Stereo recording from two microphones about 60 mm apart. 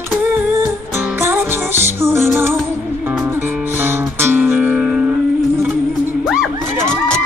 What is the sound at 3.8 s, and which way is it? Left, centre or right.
Music, right.